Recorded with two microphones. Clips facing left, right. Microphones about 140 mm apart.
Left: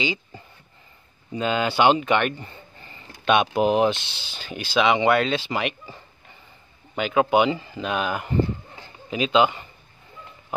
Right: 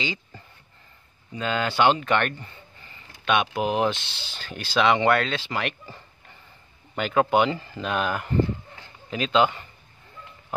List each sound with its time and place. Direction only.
0.0 s speech: 15° left (ahead or behind)
1.4 s speech: 15° left (ahead or behind)
2.8 s speech: 35° left (ahead or behind); by 4.0 s 20° left (ahead or behind)
4.3 s speech: 10° left (ahead or behind)